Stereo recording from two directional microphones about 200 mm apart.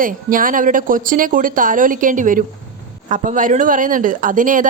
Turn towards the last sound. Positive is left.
turn(degrees=-40)  # may be behind; listen again after turning